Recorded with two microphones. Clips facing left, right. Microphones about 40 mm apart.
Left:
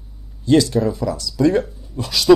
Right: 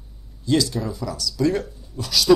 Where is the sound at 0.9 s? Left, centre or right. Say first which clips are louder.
Left 6 dB; left.